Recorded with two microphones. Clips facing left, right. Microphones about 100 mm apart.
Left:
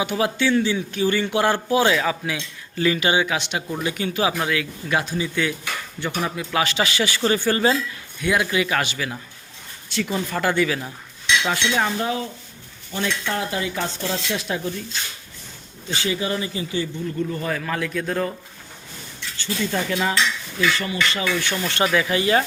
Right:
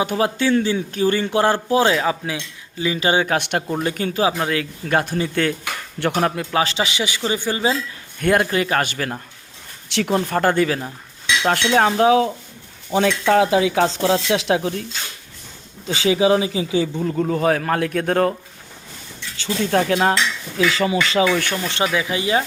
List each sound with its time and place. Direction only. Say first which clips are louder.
0.0 s speech: right 2 dB; 35° right (ahead or behind)
2.7 s speech: left 2 dB; 15° right (ahead or behind)
3.0 s speech: right 3 dB; 40° right (ahead or behind); by 3.6 s 55° right (ahead or behind)
3.7 s speech: right 3 dB; 40° right (ahead or behind); by 5.5 s 55° right (ahead or behind)
6.0 s dishes: right 7 dB; 75° right (ahead or behind)
6.5 s a man's voice: right 2 dB; 30° right (ahead or behind); by 7.8 s 15° right (ahead or behind)
8.2 s speech: right 3 dB; 45° right (ahead or behind)
9.9 s speech: right 5 dB; 65° right (ahead or behind); by 10.8 s 40° right (ahead or behind)
11.4 s dishes: right 10 dB; 60° right (ahead or behind); by 12.3 s 90° right
13.0 s speech: right 9 dB; 90° right
16.0 s a man's voice: right 10 dB; 90° right; by 18.3 s 70° right (ahead or behind)
19.6 s cutlery: right 6 dB; 70° right (ahead or behind)
20.6 s speech: right 4 dB; 90° right
21.7 s speech: left 3 dB; 20° right (ahead or behind)